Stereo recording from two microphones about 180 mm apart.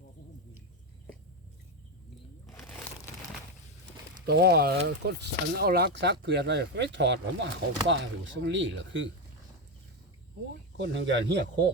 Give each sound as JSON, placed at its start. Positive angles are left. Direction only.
{"t": 4.3, "sound": "speech", "side_deg": -60}
{"t": 10.8, "sound": "speech", "side_deg": -80}